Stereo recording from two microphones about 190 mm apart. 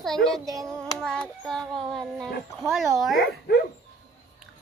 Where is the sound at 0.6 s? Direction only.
Centre (ahead or behind).